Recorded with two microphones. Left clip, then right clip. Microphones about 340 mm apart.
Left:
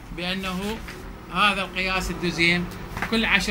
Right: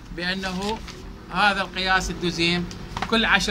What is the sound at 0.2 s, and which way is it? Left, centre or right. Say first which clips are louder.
A man's voice: right 2 dB; right.